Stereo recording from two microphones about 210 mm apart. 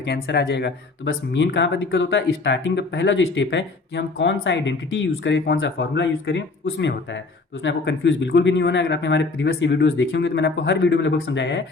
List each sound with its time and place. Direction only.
0.0 s speech: 55° left (ahead or behind)